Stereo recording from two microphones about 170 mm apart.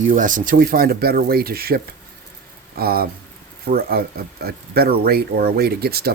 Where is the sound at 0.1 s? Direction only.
50° right (ahead or behind).